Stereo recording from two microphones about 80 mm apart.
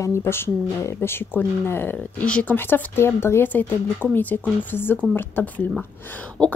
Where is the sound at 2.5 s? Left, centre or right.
Left.